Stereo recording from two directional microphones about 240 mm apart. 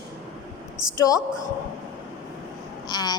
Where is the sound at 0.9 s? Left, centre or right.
Centre.